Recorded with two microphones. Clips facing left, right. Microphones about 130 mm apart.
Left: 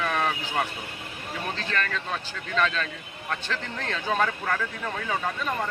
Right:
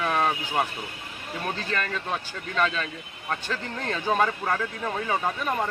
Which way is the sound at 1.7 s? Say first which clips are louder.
Even; 15° right (ahead or behind).